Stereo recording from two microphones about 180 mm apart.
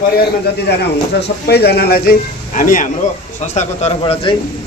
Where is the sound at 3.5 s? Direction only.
35° left (ahead or behind).